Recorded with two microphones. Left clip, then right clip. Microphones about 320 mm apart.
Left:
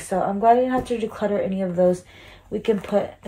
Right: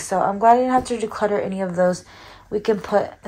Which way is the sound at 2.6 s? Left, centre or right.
Right.